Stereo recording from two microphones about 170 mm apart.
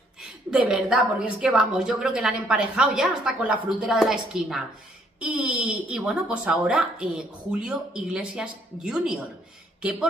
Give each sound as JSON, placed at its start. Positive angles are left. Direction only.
{"t": 0.2, "sound": "a woman's voice", "side_deg": -5}